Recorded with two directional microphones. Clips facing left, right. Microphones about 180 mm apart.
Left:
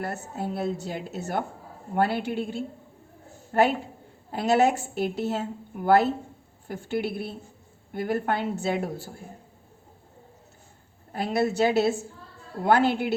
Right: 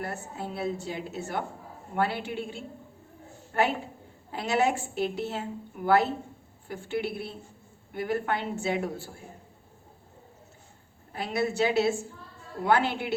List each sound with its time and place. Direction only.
0.0 s a woman's voice: 40° left (ahead or behind)
11.1 s a woman's voice: 40° left (ahead or behind)